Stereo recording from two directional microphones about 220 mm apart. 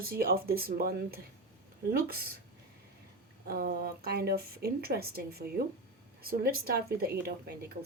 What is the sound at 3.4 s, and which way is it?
A woman's voice, 40° right (ahead or behind).